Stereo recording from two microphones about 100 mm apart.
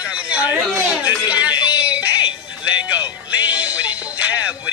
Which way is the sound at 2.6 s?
15° right (ahead or behind).